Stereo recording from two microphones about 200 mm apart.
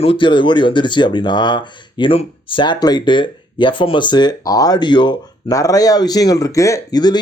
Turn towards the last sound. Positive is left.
turn(degrees=20)  # may be behind; listen again after turning